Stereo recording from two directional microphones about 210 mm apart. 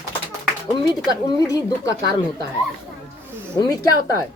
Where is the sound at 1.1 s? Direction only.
15° left (ahead or behind).